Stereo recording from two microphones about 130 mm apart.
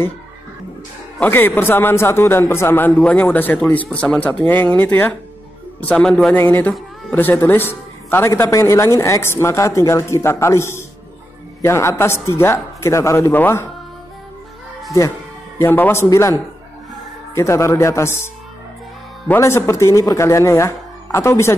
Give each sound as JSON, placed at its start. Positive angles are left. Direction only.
{"t": 1.2, "sound": "speech", "side_deg": 15}
{"t": 6.4, "sound": "a man's voice", "side_deg": 15}
{"t": 15.6, "sound": "a man's voice", "side_deg": 15}